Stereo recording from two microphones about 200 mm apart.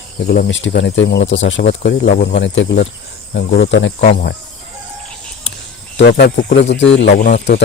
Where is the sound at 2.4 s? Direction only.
65° left (ahead or behind).